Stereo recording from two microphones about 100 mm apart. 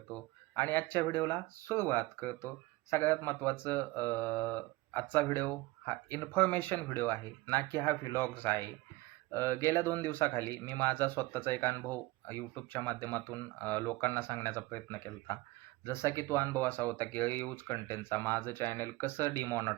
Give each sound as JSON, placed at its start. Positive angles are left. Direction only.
{"t": 0.1, "sound": "speech", "side_deg": 20}